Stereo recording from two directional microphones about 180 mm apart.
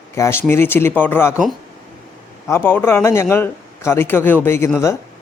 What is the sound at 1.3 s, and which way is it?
Speech, centre (ahead or behind).